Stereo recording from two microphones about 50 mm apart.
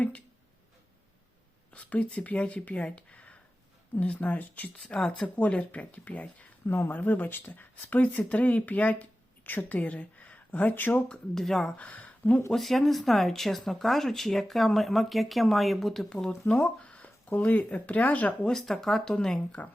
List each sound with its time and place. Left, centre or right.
1.7 s a sound: left
2.2 s speech: left
4.9 s speech: left
6.7 s a woman's voice: left
11.3 s speech: centre
11.8 s speech: left
12.5 s speech: centre
16.5 s speech: left
18.4 s speech: centre
19.5 s speech: left